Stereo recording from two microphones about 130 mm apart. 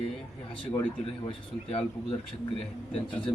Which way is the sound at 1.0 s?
45° left (ahead or behind).